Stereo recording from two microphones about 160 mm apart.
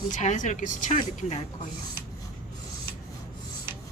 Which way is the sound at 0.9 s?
40° left (ahead or behind).